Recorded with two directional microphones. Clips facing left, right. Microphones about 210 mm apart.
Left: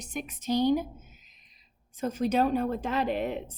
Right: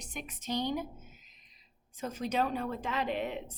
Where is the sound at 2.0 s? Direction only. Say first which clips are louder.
Left 6 dB; 45° left (ahead or behind).